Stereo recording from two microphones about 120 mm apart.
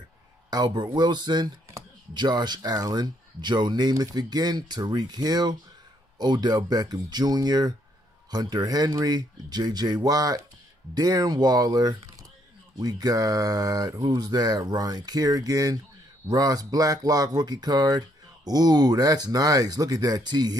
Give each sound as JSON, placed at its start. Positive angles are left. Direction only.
{"t": 0.5, "sound": "speech", "side_deg": -35}